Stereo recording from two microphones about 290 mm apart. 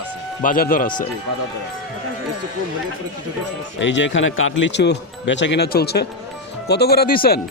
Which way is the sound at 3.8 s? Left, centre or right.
Left.